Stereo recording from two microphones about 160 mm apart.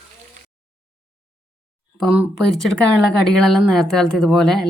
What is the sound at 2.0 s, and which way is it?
A woman's voice, 5° right (ahead or behind).